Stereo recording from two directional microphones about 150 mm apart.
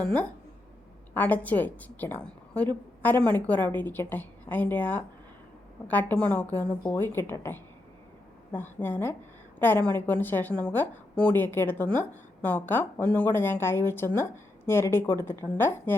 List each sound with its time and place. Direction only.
0.0 s a woman's voice: 10° left (ahead or behind)